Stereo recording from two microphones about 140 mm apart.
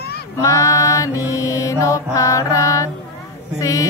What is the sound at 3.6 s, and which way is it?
Speech, 25° left (ahead or behind).